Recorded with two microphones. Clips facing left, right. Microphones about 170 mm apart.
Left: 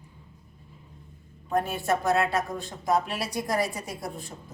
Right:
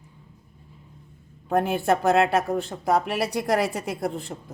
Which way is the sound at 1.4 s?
65° right (ahead or behind).